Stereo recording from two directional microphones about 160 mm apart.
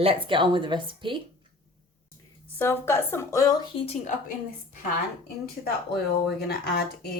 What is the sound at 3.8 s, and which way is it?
Speech, 40° left (ahead or behind).